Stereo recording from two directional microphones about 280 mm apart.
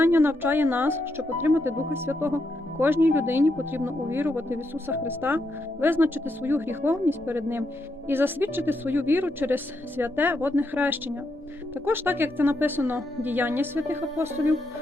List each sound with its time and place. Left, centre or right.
0.0 s speech: centre